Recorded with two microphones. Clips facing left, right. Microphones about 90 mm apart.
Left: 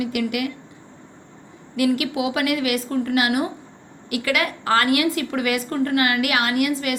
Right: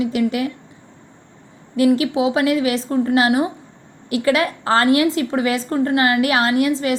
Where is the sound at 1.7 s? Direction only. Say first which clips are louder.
Right 5 dB; 30° right (ahead or behind).